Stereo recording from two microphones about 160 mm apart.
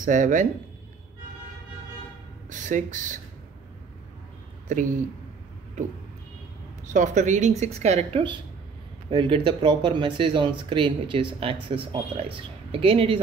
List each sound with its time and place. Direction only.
0.0 s speech: 55° right (ahead or behind)
2.5 s speech: 50° right (ahead or behind)
4.7 s speech: 50° right (ahead or behind)
6.9 s speech: 50° right (ahead or behind)